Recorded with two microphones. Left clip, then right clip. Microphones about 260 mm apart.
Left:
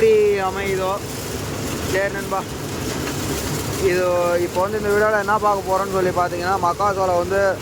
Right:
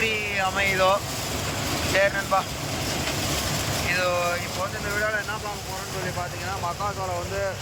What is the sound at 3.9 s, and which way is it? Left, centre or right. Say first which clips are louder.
Speech: left 4 dB; centre.